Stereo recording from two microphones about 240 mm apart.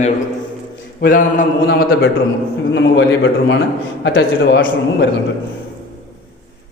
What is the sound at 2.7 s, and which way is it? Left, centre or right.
Speech, left.